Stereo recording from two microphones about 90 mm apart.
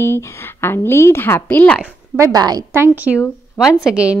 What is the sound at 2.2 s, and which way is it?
Speech, 45° right (ahead or behind).